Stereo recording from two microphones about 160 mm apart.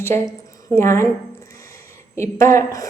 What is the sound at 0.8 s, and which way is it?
Speech, 15° left (ahead or behind).